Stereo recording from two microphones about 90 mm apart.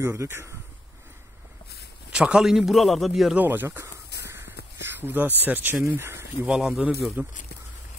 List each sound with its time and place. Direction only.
0.0 s speech: 30° right (ahead or behind)
2.1 s speech: 10° right (ahead or behind)
3.3 s a sound: 25° right (ahead or behind)
5.4 s speech: 20° right (ahead or behind)
6.4 s speech: 5° right (ahead or behind)